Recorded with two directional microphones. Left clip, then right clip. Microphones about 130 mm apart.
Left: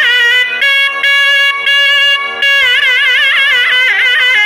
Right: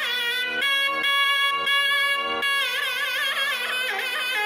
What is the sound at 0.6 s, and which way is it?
Music, 35° right (ahead or behind).